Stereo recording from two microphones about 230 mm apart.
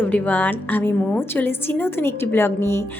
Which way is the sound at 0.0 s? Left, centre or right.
Centre.